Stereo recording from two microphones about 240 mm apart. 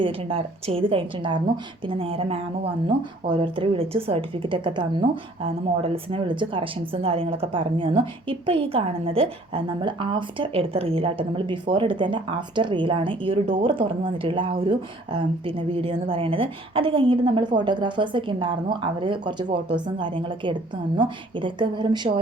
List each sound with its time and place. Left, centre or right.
0.0 s speech: right